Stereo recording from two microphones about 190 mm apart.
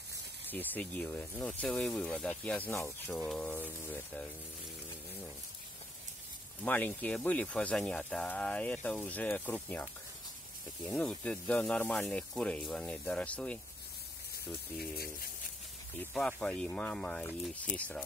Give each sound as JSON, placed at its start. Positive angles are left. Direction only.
{"t": 0.5, "sound": "speech", "side_deg": 10}
{"t": 6.6, "sound": "speech", "side_deg": 10}
{"t": 14.8, "sound": "speech", "side_deg": 50}
{"t": 16.0, "sound": "speech", "side_deg": 5}